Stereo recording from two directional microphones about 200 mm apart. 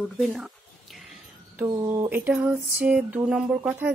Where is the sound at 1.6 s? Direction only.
10° right (ahead or behind).